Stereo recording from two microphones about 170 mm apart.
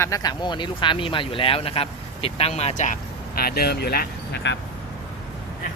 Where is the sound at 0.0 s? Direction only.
20° left (ahead or behind); by 4.5 s 70° left (ahead or behind).